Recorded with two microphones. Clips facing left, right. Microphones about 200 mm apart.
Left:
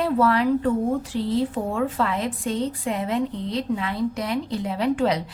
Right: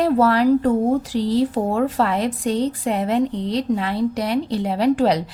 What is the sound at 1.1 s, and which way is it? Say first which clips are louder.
Speech: right 4 dB; 90° right.